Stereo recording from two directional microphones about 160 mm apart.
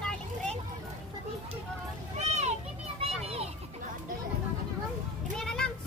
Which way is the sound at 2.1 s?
45° right (ahead or behind).